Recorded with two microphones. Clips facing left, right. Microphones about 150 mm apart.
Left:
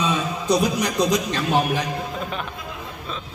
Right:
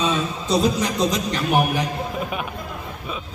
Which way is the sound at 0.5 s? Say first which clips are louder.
Even; 15° left (ahead or behind).